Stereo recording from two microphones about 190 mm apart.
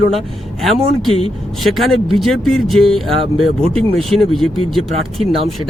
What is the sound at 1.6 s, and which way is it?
Speech, centre (ahead or behind).